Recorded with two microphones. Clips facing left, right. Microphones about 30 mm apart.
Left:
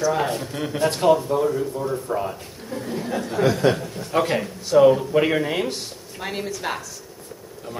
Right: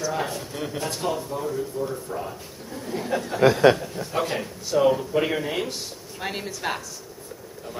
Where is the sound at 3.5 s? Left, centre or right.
Right.